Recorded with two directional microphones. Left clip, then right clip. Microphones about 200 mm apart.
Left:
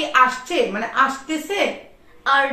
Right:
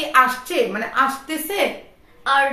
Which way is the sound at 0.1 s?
20° right (ahead or behind).